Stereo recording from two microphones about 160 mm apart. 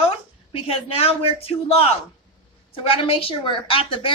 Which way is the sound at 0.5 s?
40° left (ahead or behind).